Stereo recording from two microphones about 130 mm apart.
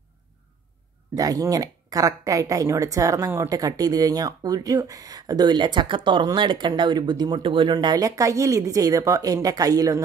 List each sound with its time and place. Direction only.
1.1 s a woman's voice: 25° right (ahead or behind)